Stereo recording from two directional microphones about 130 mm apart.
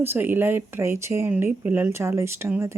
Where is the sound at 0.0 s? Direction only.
15° right (ahead or behind).